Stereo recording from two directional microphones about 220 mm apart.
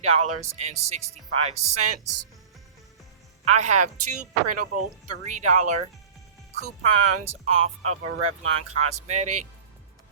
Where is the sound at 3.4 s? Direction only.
30° right (ahead or behind).